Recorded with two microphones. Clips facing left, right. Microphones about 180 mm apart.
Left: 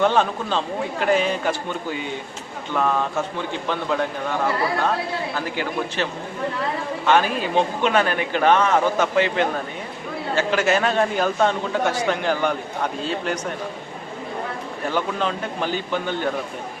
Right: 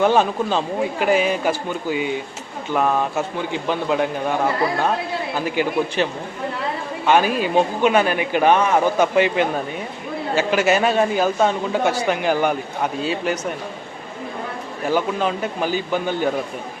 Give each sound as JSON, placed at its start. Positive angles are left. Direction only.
{"t": 0.0, "sound": "a man's voice", "side_deg": -10}
{"t": 5.3, "sound": "a man's voice", "side_deg": -15}
{"t": 14.8, "sound": "a man's voice", "side_deg": -10}